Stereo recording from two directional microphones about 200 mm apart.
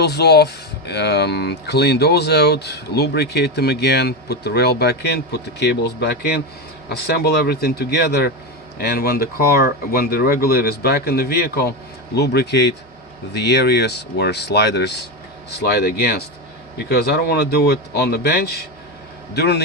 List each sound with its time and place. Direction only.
0.0 s speech: 55° left (ahead or behind)